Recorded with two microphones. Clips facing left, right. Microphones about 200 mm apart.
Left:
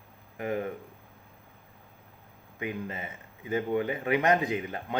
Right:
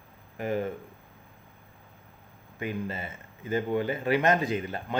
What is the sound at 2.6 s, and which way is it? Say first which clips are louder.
Speech: right 2 dB; 20° left (ahead or behind).